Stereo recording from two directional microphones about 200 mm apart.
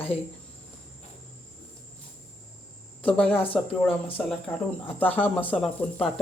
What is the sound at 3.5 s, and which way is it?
Speech, 5° left (ahead or behind).